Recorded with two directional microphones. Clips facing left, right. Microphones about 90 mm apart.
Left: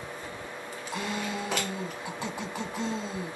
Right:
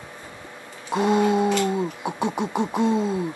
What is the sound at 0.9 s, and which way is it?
Music, 20° right (ahead or behind).